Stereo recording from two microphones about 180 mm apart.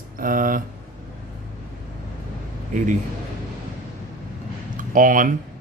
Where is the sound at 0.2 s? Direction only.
50° right (ahead or behind).